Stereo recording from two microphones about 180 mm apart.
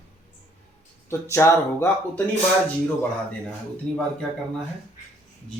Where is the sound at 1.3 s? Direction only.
15° left (ahead or behind).